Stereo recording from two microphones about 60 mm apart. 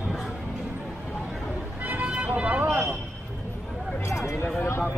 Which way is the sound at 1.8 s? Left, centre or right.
Right.